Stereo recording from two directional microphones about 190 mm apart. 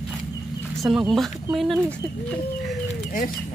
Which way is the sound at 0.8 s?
Centre (ahead or behind).